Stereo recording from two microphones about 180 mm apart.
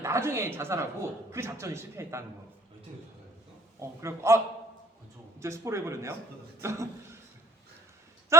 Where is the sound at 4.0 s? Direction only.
15° right (ahead or behind).